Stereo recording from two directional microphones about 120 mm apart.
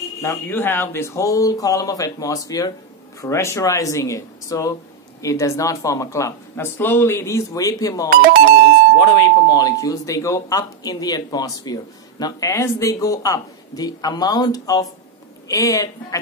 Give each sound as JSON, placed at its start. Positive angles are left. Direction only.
{"t": 0.2, "sound": "speech", "side_deg": 20}